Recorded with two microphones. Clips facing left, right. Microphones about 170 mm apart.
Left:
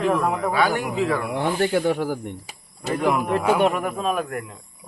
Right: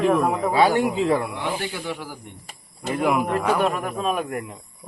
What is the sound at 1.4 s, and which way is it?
Speech, 50° left (ahead or behind).